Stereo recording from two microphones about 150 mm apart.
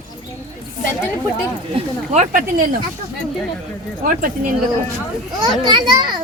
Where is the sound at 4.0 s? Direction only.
70° right (ahead or behind).